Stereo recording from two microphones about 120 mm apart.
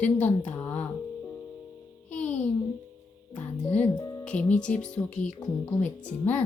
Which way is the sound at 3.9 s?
30° left (ahead or behind).